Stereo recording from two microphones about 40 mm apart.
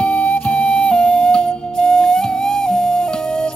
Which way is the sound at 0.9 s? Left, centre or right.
Left.